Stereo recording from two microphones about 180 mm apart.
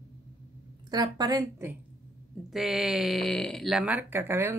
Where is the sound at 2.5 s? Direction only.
Centre (ahead or behind).